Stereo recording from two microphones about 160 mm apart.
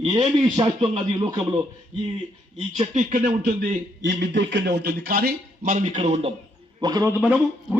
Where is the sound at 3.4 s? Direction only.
75° right (ahead or behind); by 6.3 s 45° right (ahead or behind).